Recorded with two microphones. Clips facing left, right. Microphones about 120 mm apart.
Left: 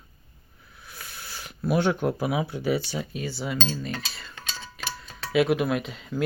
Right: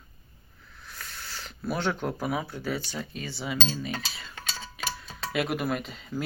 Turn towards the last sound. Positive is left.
turn(degrees=0)  # may be behind; listen again after turning